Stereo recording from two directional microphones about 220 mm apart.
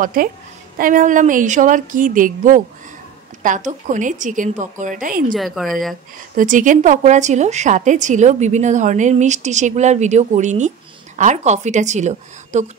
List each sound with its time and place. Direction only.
0.0 s a woman's voice: 40° right (ahead or behind)
5.3 s speech: centre (ahead or behind)
6.3 s a woman's voice: 35° right (ahead or behind)